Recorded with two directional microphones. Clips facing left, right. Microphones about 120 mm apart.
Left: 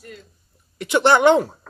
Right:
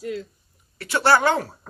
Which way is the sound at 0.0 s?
90° right.